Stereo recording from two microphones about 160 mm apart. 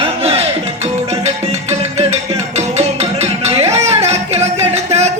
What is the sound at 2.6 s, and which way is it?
Music, 45° right (ahead or behind).